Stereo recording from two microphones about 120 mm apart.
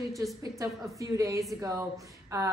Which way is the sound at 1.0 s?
25° right (ahead or behind).